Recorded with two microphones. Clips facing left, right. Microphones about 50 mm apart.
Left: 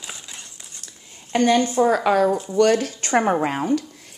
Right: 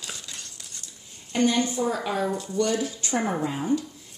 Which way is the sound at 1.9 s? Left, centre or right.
Left.